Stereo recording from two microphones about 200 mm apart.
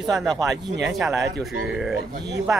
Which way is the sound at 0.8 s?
Centre (ahead or behind).